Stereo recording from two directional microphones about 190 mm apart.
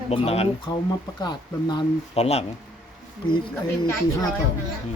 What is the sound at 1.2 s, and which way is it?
Speech, 20° left (ahead or behind).